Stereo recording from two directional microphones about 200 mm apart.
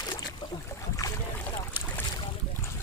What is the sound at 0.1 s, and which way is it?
Boat, 15° left (ahead or behind).